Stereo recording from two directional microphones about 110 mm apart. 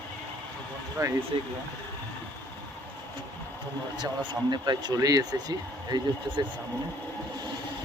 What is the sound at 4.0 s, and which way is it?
Speech, 40° right (ahead or behind).